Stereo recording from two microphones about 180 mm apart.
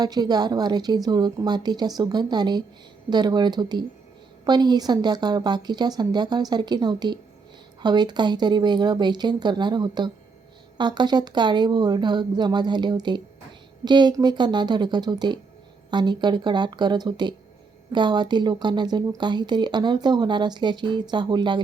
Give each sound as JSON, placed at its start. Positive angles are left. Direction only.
{"t": 0.0, "sound": "speech", "side_deg": -20}